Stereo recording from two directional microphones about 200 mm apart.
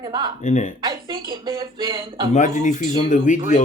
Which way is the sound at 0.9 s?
25° right (ahead or behind).